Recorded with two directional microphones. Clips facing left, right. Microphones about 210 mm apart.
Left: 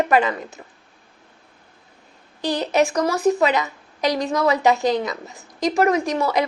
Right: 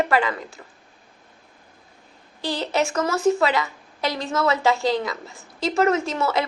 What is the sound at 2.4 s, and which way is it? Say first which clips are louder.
A woman's voice: left 4 dB; 15° left (ahead or behind).